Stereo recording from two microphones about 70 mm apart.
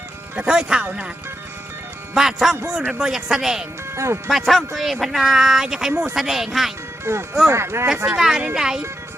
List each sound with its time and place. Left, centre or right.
0.3 s speech: centre
2.1 s speech: centre
3.9 s speech: right
4.3 s speech: centre
7.0 s speech: right
8.0 s speech: centre